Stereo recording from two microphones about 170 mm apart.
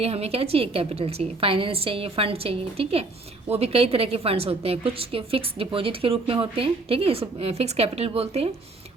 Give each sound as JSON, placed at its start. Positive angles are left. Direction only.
{"t": 0.0, "sound": "a woman's voice", "side_deg": -35}